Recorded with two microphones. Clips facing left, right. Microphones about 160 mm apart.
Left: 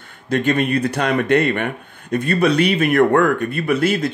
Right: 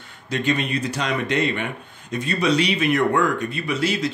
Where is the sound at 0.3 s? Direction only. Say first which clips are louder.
Left 5 dB; 50° left (ahead or behind).